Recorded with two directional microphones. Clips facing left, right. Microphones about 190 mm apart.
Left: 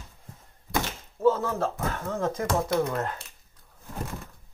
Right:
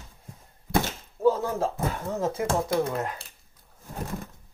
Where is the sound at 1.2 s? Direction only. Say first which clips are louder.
Even; 15° right (ahead or behind).